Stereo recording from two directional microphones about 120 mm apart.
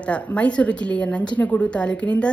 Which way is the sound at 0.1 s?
10° left (ahead or behind).